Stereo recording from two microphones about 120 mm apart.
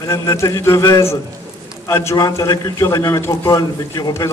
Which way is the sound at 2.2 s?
35° left (ahead or behind).